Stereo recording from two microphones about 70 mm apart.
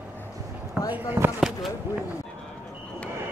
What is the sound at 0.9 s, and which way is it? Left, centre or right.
Speech, right.